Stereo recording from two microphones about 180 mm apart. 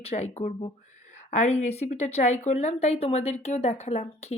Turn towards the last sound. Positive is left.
turn(degrees=40)  # may be behind; listen again after turning